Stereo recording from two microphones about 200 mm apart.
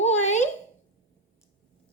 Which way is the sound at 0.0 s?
35° left (ahead or behind).